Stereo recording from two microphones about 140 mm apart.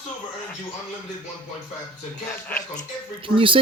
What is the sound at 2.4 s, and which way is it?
Speech, 10° left (ahead or behind).